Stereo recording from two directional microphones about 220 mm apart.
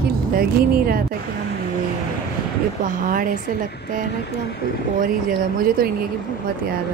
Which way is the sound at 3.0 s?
40° right (ahead or behind).